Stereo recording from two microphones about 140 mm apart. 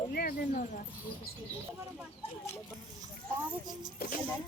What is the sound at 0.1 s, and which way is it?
Speech, 90° left.